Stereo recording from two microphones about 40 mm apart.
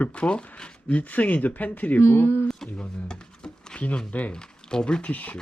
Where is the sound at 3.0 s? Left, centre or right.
Centre.